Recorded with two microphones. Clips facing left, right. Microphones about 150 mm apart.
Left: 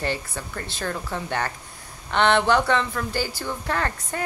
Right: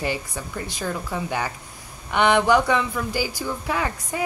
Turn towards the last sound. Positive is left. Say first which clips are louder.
# right 1 dB
turn(degrees=-10)  # may be behind; listen again after turning